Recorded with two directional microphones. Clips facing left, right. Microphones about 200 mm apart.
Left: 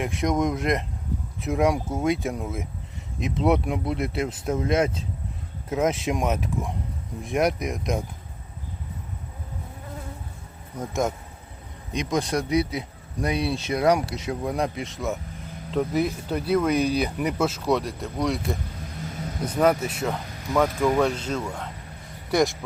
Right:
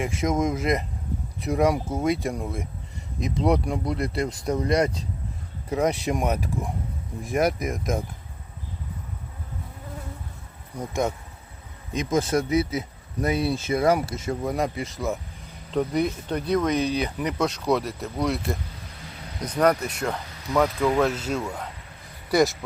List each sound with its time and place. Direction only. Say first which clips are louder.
0.0 s speech: even; centre (ahead or behind)
10.8 s speech: even; centre (ahead or behind)